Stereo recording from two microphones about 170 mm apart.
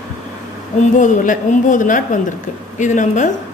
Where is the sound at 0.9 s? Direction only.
45° left (ahead or behind).